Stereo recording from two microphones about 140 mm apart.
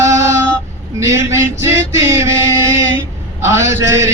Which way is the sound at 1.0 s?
20° right (ahead or behind).